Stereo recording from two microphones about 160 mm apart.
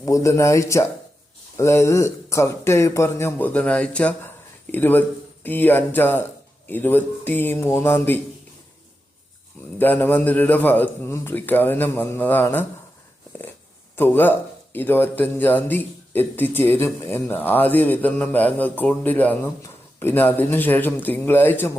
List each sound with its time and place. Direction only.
0.0 s speech: 20° left (ahead or behind)
9.7 s speech: 10° left (ahead or behind)
13.9 s speech: 10° left (ahead or behind)